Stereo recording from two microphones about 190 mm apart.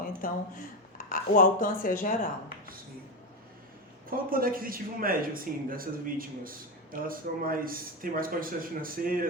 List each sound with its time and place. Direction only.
0.2 s speech: 45° left (ahead or behind)
4.1 s a man's voice: 50° right (ahead or behind)